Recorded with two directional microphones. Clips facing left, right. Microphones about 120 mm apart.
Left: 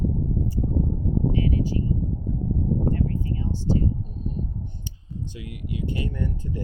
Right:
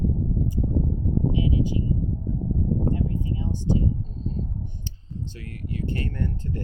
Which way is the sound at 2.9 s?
15° right (ahead or behind).